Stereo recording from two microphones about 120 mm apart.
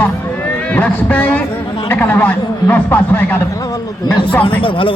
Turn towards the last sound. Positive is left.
turn(degrees=45)  # may be behind; listen again after turning